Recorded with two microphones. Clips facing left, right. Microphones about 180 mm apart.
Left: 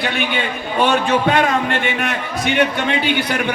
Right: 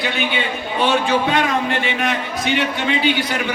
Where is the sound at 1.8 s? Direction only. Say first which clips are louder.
Even; 55° left (ahead or behind).